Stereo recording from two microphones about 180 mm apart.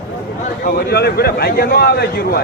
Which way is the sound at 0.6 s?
60° left (ahead or behind).